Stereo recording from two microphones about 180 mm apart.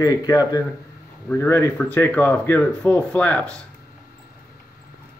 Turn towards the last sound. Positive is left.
turn(degrees=5)  # may be behind; listen again after turning